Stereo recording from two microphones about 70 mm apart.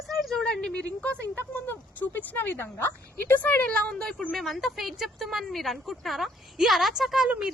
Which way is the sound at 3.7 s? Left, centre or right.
Centre.